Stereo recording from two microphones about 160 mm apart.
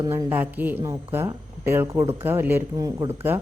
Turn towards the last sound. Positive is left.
turn(degrees=-15)  # may be behind; listen again after turning